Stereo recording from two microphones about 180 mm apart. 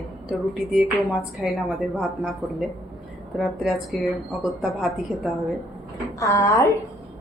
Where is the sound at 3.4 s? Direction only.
Centre (ahead or behind).